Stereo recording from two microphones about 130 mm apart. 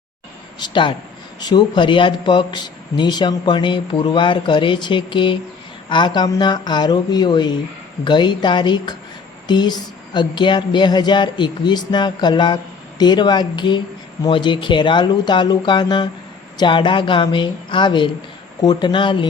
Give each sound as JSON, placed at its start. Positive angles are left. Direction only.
{"t": 0.6, "sound": "speech", "side_deg": 40}